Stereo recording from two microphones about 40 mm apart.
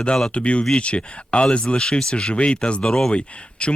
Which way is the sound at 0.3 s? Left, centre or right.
Left.